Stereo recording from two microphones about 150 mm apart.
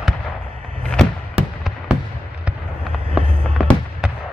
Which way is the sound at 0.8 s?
5° left (ahead or behind).